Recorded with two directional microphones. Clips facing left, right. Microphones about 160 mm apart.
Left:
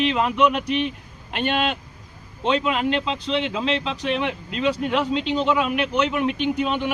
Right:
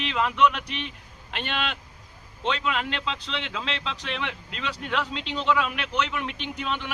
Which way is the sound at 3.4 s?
10° left (ahead or behind).